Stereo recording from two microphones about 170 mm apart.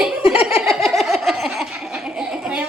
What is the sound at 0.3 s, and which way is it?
Giggle, 5° right (ahead or behind).